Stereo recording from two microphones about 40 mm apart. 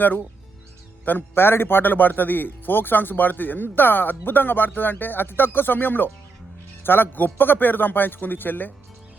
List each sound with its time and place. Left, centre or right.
1.4 s a man's voice: left